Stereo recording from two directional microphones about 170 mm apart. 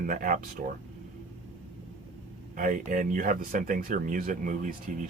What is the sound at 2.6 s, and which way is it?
Speech, 50° right (ahead or behind).